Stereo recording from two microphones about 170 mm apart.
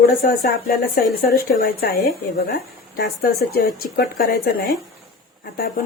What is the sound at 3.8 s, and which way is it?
Speech, 60° left (ahead or behind).